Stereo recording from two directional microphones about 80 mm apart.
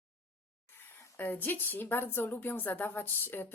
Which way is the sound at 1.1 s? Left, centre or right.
Left.